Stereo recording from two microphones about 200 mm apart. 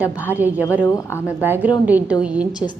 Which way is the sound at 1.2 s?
10° right (ahead or behind).